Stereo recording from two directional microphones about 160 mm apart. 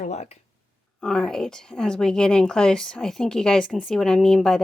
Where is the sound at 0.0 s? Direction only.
45° left (ahead or behind).